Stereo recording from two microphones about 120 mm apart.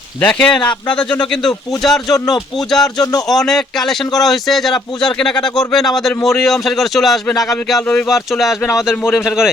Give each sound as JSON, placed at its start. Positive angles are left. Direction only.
{"t": 0.2, "sound": "a man's voice", "side_deg": 10}
{"t": 3.0, "sound": "speech", "side_deg": 30}
{"t": 3.2, "sound": "a man's voice", "side_deg": 5}